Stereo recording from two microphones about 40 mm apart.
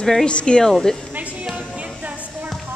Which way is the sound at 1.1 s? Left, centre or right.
Right.